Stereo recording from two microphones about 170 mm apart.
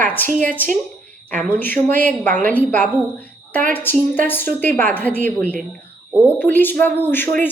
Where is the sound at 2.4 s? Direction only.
10° left (ahead or behind).